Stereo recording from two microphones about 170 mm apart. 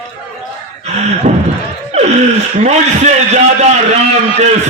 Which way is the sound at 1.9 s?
40° right (ahead or behind).